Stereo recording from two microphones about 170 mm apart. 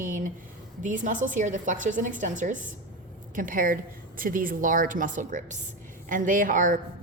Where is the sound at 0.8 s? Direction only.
50° right (ahead or behind).